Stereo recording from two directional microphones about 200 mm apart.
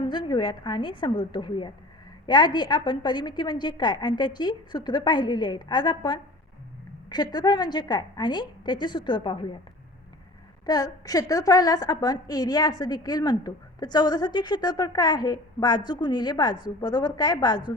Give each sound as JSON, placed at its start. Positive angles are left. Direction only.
{"t": 0.0, "sound": "a woman's voice", "side_deg": 25}
{"t": 10.7, "sound": "a woman's voice", "side_deg": 20}